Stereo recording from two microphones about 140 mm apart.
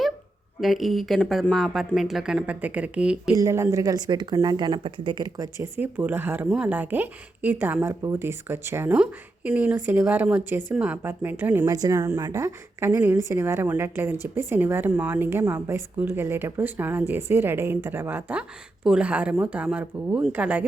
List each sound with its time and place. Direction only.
0.6 s a woman's voice: centre (ahead or behind)
3.3 s a woman's voice: 20° right (ahead or behind)
11.7 s a woman's voice: 25° right (ahead or behind)